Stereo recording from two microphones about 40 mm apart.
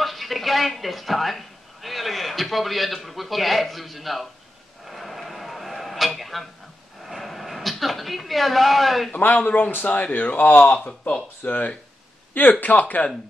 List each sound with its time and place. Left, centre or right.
0.0 s a woman's voice: centre
4.8 s a sound: centre
9.1 s speech: left
9.8 s speech: left
10.7 s speech: left
11.4 s speech: left